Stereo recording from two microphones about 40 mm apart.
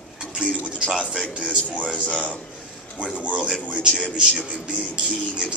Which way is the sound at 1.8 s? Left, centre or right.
Right.